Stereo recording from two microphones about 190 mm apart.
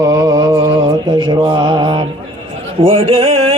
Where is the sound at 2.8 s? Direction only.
30° right (ahead or behind).